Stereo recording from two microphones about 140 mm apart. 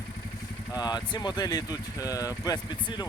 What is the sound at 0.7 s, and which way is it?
Speech, 30° left (ahead or behind).